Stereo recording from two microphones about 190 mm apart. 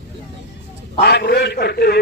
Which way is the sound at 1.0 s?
55° left (ahead or behind).